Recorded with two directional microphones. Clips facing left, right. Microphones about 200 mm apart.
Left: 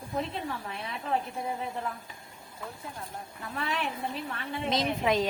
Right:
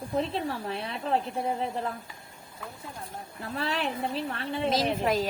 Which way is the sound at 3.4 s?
35° right (ahead or behind).